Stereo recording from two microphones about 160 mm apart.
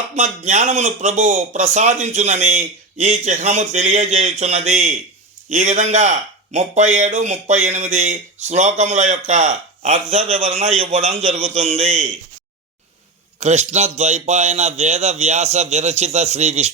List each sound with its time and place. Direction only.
0.2 s a man's voice: 45° right (ahead or behind)
13.4 s a man's voice: 45° right (ahead or behind)